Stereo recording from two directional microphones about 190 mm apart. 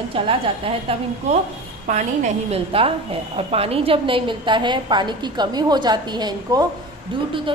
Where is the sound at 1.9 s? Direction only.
40° right (ahead or behind).